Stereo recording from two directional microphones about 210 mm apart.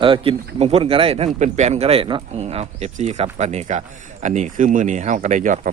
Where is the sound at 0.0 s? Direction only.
25° right (ahead or behind).